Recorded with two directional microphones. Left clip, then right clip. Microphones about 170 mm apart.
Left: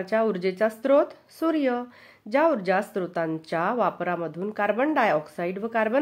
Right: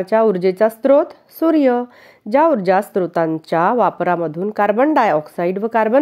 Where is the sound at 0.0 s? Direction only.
40° right (ahead or behind).